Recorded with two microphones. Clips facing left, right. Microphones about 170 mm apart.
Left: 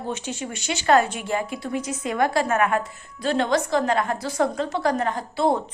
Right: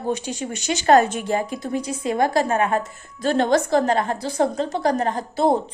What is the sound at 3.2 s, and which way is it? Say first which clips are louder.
A woman's voice: right 3 dB; 45° right (ahead or behind).